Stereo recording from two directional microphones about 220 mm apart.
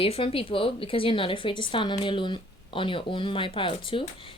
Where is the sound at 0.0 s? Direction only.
25° left (ahead or behind).